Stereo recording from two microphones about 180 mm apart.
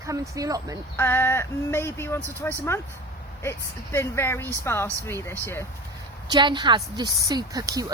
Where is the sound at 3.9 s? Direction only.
15° left (ahead or behind).